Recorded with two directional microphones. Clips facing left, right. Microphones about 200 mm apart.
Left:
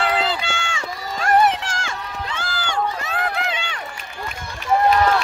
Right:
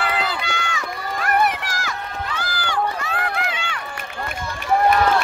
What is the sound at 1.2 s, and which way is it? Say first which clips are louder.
Run: left 4 dB; 25° left (ahead or behind).